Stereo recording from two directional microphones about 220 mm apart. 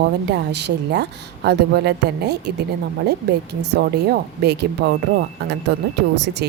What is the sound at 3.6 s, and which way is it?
Speech, 50° right (ahead or behind).